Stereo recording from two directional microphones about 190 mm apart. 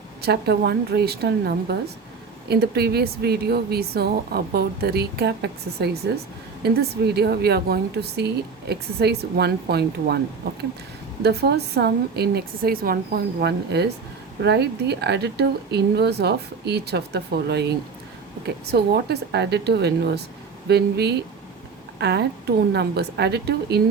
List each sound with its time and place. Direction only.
0.2 s a woman's voice: 60° right (ahead or behind)
11.2 s a woman's voice: 60° right (ahead or behind)